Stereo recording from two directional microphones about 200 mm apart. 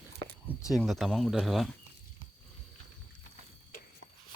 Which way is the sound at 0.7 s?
Centre (ahead or behind).